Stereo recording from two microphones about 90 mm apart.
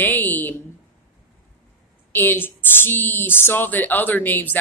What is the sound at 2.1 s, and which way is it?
A woman's voice, 20° left (ahead or behind).